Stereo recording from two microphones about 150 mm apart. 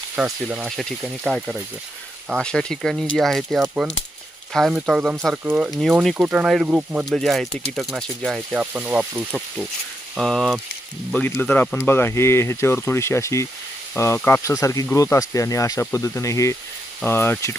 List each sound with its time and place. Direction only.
0.2 s speech: 10° right (ahead or behind)
7.0 s speech: centre (ahead or behind)